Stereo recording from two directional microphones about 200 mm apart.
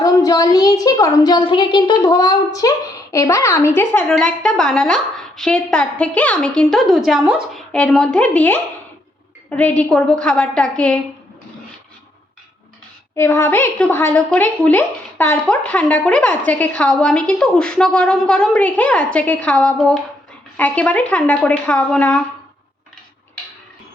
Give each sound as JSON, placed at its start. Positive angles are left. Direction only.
{"t": 0.0, "sound": "a woman's voice", "side_deg": 20}
{"t": 13.1, "sound": "a woman's voice", "side_deg": 10}